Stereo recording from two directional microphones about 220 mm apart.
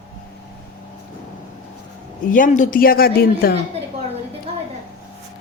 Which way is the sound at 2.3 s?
35° left (ahead or behind).